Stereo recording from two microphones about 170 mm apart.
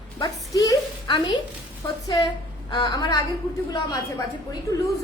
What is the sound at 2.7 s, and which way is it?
Speech, 25° left (ahead or behind).